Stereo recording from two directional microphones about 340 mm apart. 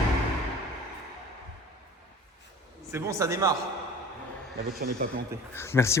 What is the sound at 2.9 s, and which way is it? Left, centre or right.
Speech, centre.